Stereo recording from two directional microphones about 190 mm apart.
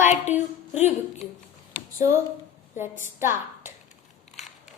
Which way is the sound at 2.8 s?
10° right (ahead or behind).